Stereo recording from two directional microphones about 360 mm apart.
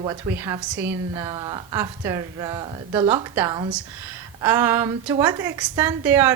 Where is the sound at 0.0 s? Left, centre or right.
Centre.